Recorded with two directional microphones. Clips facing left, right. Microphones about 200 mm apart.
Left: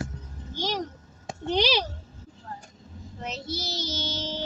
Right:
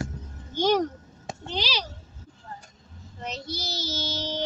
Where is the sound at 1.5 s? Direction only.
55° left (ahead or behind).